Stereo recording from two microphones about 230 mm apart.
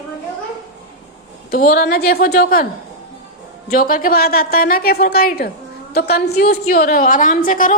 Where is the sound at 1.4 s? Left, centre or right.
Left.